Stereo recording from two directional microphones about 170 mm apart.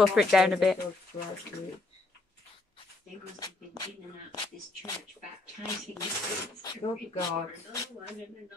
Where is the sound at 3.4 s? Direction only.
20° left (ahead or behind).